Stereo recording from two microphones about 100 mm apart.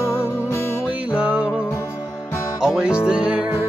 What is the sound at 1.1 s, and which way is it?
Music, 10° right (ahead or behind).